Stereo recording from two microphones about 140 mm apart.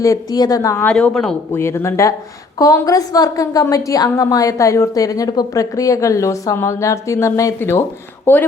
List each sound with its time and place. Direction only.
0.0 s a woman's voice: 25° left (ahead or behind)
0.9 s a woman's voice: 5° left (ahead or behind)
1.5 s a woman's voice: 20° left (ahead or behind)